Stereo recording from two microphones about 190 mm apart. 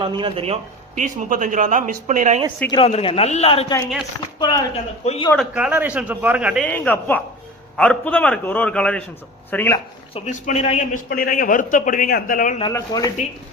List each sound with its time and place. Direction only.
0.0 s a man's voice: 25° right (ahead or behind); by 2.4 s 40° right (ahead or behind)
2.6 s a man's voice: 30° left (ahead or behind)
4.4 s speech: 20° left (ahead or behind)
5.0 s a man's voice: 30° left (ahead or behind)
5.3 s a man's voice: centre (ahead or behind)
6.7 s a man's voice: 10° left (ahead or behind)
10.2 s a man's voice: 40° left (ahead or behind)
12.7 s a man's voice: 15° left (ahead or behind)